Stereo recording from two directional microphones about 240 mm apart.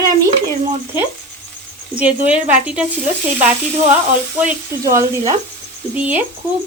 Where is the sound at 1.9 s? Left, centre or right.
Centre.